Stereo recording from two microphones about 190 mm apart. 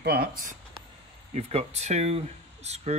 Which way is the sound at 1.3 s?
35° right (ahead or behind).